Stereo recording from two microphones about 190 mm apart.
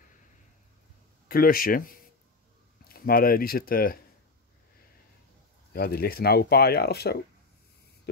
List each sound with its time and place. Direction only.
1.3 s speech: 50° left (ahead or behind)
5.7 s speech: 55° left (ahead or behind)